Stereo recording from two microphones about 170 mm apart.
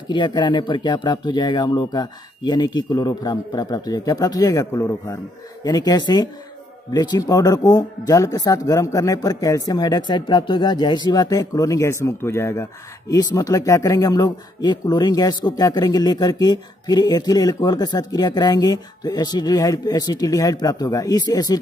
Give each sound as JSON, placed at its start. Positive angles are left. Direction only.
{"t": 0.1, "sound": "speech", "side_deg": 25}